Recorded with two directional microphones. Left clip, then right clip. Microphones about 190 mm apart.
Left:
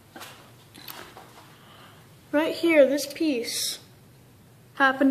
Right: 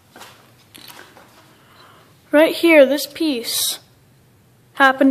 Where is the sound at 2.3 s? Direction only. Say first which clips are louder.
Right 10 dB; 35° right (ahead or behind).